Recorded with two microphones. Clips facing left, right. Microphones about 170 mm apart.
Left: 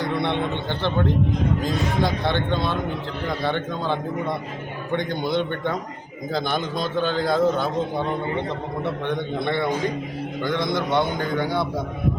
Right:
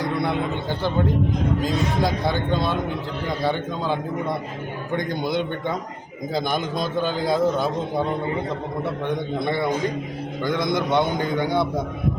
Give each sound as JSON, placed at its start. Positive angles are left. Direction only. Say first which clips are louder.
{"t": 0.0, "sound": "a man's voice", "louder": "even", "side_deg": 0}
{"t": 5.4, "sound": "a man's voice", "louder": "left 1 dB", "side_deg": -10}
{"t": 7.0, "sound": "a man's voice", "louder": "left 1 dB", "side_deg": -5}
{"t": 10.7, "sound": "a man's voice", "louder": "right 3 dB", "side_deg": -20}